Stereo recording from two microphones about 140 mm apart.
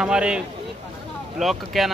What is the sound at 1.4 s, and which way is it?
Speech, centre (ahead or behind).